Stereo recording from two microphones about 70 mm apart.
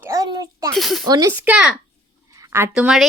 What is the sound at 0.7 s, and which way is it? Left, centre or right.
Speech, centre.